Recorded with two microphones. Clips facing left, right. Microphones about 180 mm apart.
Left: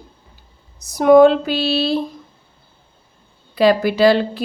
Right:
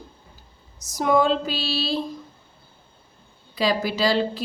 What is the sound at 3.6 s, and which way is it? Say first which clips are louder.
Speech: left 9 dB; 60° left (ahead or behind).